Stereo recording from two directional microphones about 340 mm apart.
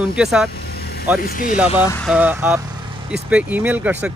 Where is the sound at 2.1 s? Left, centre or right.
Centre.